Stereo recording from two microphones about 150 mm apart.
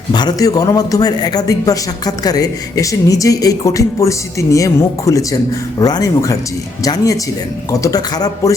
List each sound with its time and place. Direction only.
0.1 s speech: 30° left (ahead or behind)